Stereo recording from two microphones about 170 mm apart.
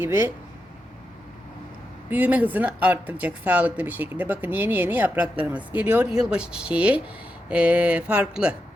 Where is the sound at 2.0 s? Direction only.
10° right (ahead or behind).